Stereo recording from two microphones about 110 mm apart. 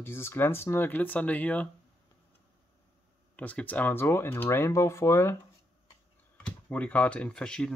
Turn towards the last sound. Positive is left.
turn(degrees=5)  # may be behind; listen again after turning